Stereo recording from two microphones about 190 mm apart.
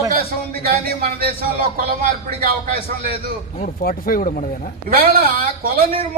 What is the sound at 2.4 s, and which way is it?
Speech, 50° right (ahead or behind).